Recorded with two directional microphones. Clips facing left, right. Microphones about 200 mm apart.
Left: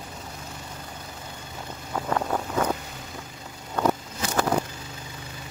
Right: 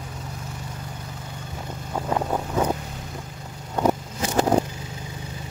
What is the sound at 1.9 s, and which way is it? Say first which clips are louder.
Vehicle: right 2 dB; 15° right (ahead or behind).